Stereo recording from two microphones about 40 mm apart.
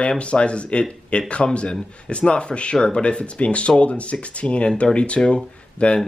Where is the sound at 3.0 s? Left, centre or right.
Left.